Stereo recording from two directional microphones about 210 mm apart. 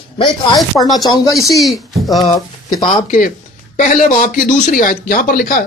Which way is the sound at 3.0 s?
40° left (ahead or behind).